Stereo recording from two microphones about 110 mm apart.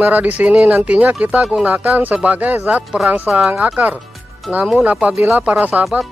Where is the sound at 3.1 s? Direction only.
15° right (ahead or behind).